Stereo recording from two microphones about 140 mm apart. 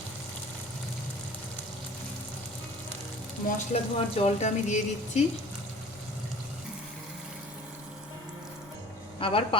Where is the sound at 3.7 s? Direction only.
55° left (ahead or behind).